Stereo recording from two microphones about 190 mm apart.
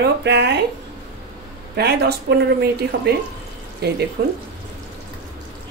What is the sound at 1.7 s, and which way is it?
A woman's voice, 60° right (ahead or behind).